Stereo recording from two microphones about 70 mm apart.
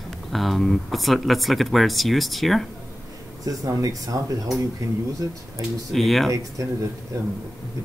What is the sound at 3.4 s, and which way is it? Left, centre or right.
Speech, right.